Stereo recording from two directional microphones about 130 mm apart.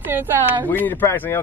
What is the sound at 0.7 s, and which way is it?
Speech, 15° left (ahead or behind).